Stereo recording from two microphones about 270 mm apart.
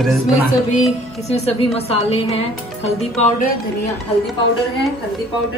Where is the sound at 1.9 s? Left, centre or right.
Left.